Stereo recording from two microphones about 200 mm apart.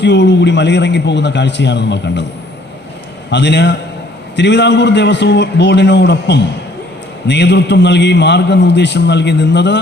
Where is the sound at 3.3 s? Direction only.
60° left (ahead or behind).